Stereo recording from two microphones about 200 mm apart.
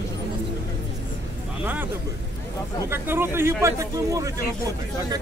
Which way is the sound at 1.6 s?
10° right (ahead or behind).